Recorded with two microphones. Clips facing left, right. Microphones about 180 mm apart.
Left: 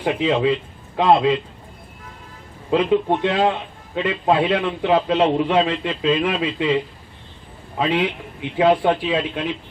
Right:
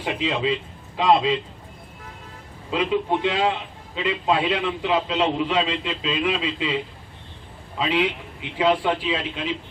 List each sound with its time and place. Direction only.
0.0 s a man's voice: 60° left (ahead or behind)
2.6 s a man's voice: 55° left (ahead or behind)
7.8 s a man's voice: 55° left (ahead or behind)